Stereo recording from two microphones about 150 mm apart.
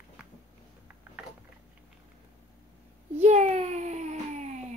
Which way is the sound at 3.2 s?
45° right (ahead or behind).